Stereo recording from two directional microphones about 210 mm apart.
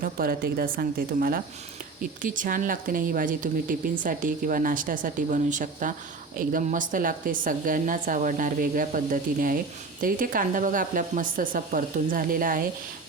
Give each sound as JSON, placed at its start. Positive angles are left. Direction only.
{"t": 0.0, "sound": "speech", "side_deg": -45}